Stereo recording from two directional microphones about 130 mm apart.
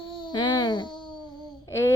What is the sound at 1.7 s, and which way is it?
Speech, 20° left (ahead or behind).